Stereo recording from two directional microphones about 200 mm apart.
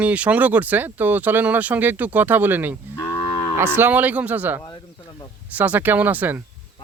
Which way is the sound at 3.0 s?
20° left (ahead or behind).